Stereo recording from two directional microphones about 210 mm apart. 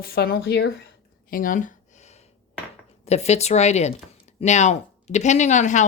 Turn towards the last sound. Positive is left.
turn(degrees=35)  # may be behind; listen again after turning